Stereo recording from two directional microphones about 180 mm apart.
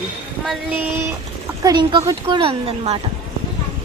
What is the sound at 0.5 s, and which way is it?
Speech, 5° right (ahead or behind).